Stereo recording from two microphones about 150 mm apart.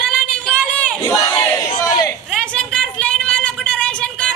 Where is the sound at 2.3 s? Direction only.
5° left (ahead or behind).